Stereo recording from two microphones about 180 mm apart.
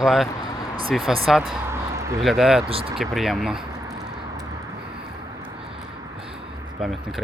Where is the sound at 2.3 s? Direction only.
Centre (ahead or behind).